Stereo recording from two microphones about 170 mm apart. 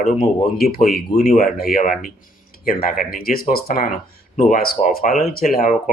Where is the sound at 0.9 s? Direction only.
60° left (ahead or behind).